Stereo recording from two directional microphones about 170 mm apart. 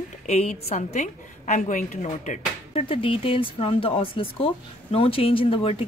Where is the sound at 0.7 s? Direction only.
45° left (ahead or behind).